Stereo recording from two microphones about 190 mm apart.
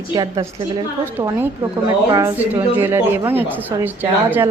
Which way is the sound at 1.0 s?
10° right (ahead or behind).